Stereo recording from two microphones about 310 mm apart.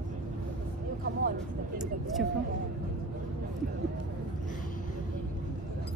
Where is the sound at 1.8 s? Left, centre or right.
Centre.